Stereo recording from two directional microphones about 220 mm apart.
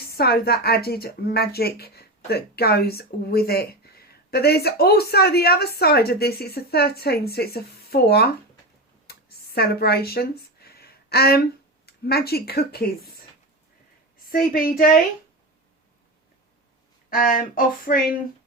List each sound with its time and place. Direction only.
0.1 s a woman's voice: 45° left (ahead or behind)
9.0 s a sound: 45° left (ahead or behind)
11.9 s a woman's voice: 45° left (ahead or behind)
14.3 s speech: 40° left (ahead or behind)
17.1 s speech: 40° left (ahead or behind)